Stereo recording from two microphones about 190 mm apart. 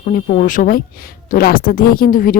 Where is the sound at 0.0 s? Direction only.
45° left (ahead or behind).